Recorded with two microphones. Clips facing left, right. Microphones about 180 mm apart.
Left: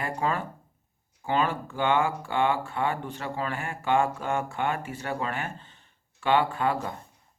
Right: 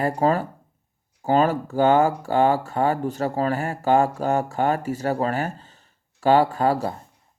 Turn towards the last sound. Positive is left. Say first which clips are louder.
# right 6 dB
turn(degrees=-35)  # may be behind; listen again after turning